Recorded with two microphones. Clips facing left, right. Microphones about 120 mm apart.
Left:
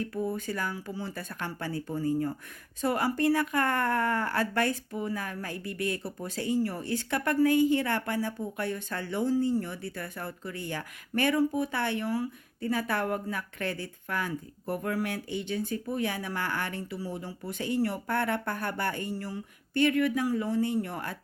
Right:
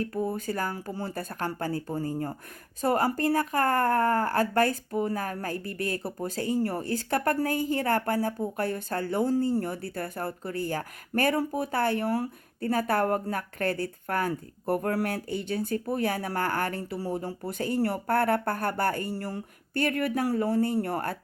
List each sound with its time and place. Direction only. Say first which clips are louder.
0.0 s speech: right 2 dB; 40° right (ahead or behind); by 12.3 s 55° right (ahead or behind)
12.6 s speech: right 4 dB; 45° right (ahead or behind)
19.1 s speech: right 2 dB; 55° right (ahead or behind)